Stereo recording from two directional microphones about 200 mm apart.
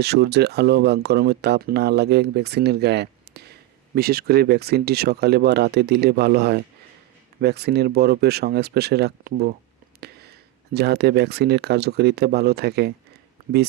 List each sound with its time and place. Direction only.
0.0 s speech: 55° right (ahead or behind)
10.0 s a sound: 55° right (ahead or behind)
10.8 s speech: 55° right (ahead or behind)